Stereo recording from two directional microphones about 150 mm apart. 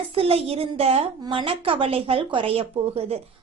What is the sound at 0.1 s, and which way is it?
A woman's voice, 40° right (ahead or behind).